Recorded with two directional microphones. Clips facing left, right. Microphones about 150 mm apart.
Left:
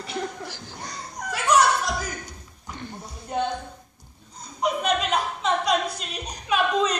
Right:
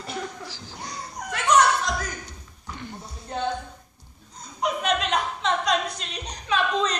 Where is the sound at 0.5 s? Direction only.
55° left (ahead or behind).